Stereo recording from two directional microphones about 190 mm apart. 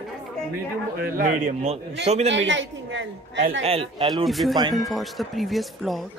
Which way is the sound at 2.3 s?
75° right (ahead or behind).